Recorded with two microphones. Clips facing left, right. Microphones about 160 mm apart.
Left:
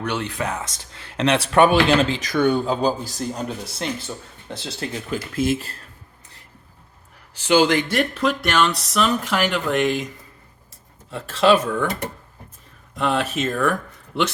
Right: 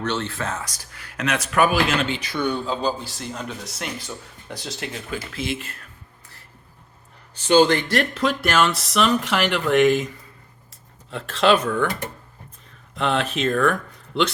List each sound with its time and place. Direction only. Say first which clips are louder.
0.0 s speech: left 1 dB; 15° left (ahead or behind)
5.1 s speech: left 7 dB; 45° left (ahead or behind)
7.3 s speech: right 1 dB; 10° left (ahead or behind)
11.1 s speech: left 2 dB; centre (ahead or behind)
13.0 s speech: left 1 dB; centre (ahead or behind)